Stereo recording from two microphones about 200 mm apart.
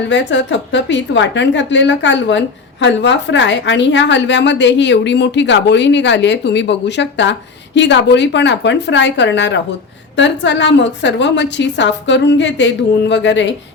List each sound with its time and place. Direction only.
0.1 s a woman's voice: 65° left (ahead or behind)